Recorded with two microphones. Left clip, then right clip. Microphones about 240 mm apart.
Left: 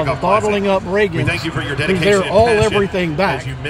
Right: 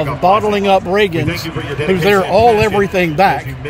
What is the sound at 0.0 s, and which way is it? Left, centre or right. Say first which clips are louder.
Speech: right 3 dB; right.